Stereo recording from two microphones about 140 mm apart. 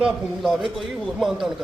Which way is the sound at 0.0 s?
Centre (ahead or behind).